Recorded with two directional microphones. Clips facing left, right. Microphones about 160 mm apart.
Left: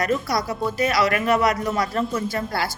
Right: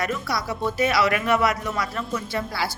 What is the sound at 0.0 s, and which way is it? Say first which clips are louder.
A woman's voice: left 4 dB; 40° left (ahead or behind).